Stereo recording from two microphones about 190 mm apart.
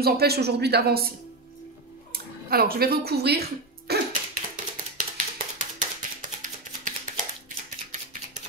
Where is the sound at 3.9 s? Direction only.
55° right (ahead or behind).